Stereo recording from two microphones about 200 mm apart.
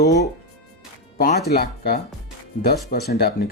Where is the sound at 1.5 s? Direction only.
50° left (ahead or behind).